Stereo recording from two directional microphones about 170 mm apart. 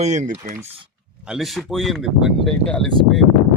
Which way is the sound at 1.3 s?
Centre (ahead or behind).